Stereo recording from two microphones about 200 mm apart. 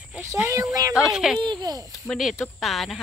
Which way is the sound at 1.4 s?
20° right (ahead or behind).